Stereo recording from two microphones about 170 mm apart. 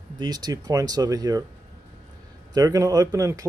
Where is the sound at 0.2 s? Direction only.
25° right (ahead or behind).